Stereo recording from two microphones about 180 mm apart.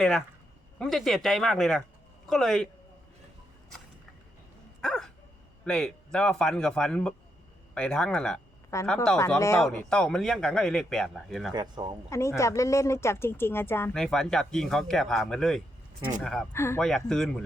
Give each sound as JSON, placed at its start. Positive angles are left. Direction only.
{"t": 0.0, "sound": "speech", "side_deg": 5}
{"t": 4.8, "sound": "dog", "side_deg": 5}
{"t": 5.6, "sound": "speech", "side_deg": 5}
{"t": 8.7, "sound": "speech", "side_deg": 15}
{"t": 9.6, "sound": "speech", "side_deg": 5}
{"t": 11.5, "sound": "speech", "side_deg": -25}
{"t": 12.4, "sound": "speech", "side_deg": 15}
{"t": 14.0, "sound": "speech", "side_deg": 5}
{"t": 16.5, "sound": "speech", "side_deg": 15}
{"t": 16.8, "sound": "speech", "side_deg": 0}